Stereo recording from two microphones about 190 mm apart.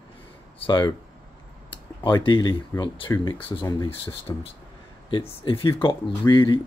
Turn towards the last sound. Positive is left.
turn(degrees=25)  # may be behind; listen again after turning